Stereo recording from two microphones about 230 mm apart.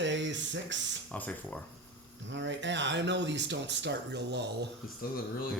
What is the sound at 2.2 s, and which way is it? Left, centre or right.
Speech, right.